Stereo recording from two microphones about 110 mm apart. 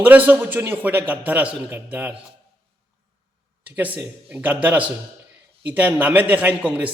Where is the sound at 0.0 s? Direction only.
15° right (ahead or behind).